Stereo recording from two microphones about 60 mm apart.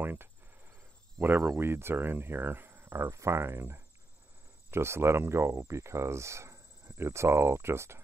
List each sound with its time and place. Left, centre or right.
0.0 s speech: right